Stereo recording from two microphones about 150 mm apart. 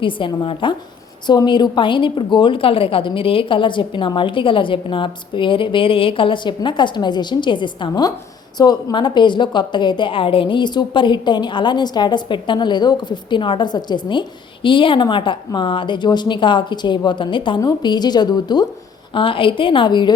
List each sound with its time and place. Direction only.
0.0 s a woman's voice: 35° left (ahead or behind)